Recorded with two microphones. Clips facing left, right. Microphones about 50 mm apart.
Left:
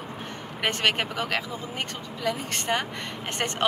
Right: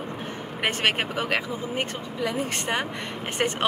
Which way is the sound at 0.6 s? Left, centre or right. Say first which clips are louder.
Even; centre.